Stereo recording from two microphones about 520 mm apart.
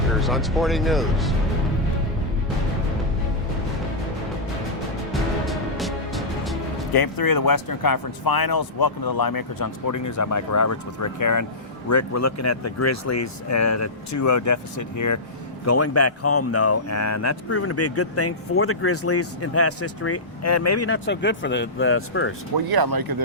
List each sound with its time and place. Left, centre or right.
0.1 s speech: centre
5.5 s music: centre
6.9 s speech: left
22.5 s speech: right